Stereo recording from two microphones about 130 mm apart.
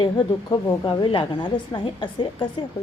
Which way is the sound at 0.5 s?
40° left (ahead or behind).